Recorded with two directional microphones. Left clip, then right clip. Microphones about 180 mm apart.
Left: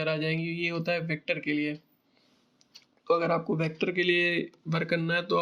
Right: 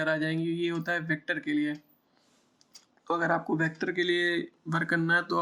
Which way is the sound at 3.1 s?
25° left (ahead or behind).